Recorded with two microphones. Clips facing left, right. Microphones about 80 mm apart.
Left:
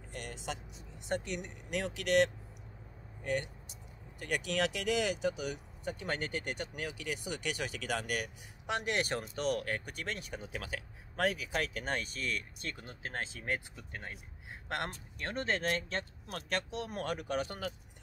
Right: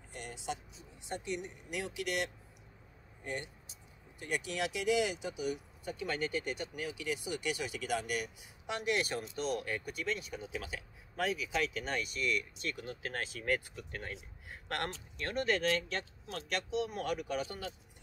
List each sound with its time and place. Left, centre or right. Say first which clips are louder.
0.1 s vehicle: even; left
1.0 s speech: left 2 dB; left
4.2 s speech: left 3 dB; left